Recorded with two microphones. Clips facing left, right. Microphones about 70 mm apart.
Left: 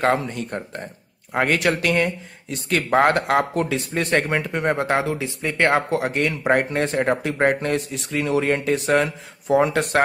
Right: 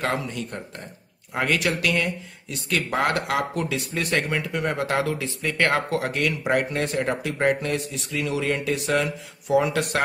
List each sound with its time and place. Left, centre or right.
0.0 s speech: left